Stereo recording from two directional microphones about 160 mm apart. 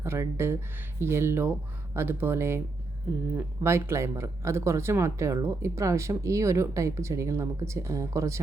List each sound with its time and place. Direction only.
0.0 s speech: 15° right (ahead or behind)